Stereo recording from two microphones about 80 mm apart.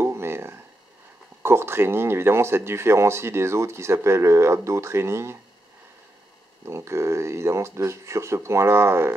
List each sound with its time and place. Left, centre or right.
0.0 s a sound: right
1.4 s speech: right
6.6 s speech: right